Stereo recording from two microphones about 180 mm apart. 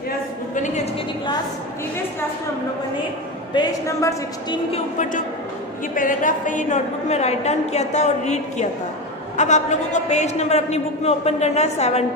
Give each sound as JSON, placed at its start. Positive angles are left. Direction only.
{"t": 3.5, "sound": "a woman's voice", "side_deg": 15}
{"t": 4.7, "sound": "a man's voice", "side_deg": 45}